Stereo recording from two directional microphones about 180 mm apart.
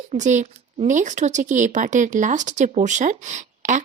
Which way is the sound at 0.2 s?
40° right (ahead or behind).